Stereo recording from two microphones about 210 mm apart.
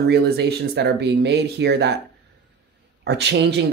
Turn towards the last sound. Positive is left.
turn(degrees=-55)  # may be behind; listen again after turning